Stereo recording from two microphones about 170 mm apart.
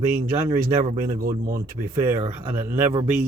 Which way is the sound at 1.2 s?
60° right (ahead or behind).